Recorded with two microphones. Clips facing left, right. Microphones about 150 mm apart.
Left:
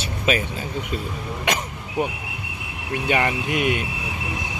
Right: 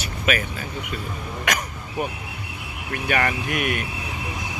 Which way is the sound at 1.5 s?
25° left (ahead or behind).